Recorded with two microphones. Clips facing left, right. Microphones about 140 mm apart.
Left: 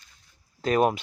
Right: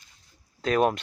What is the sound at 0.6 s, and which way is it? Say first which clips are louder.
Speech: left 1 dB; 5° left (ahead or behind).